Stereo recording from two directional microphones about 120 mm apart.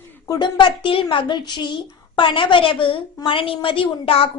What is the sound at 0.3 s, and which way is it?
A child's voice, 35° left (ahead or behind).